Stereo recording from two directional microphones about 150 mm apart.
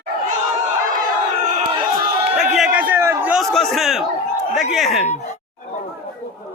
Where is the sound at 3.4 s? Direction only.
Centre (ahead or behind).